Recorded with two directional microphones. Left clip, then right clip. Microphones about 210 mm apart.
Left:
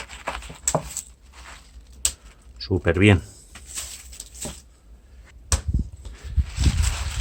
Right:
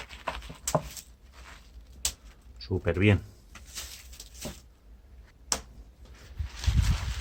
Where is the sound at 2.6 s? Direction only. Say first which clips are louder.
Left 8 dB; 40° left (ahead or behind).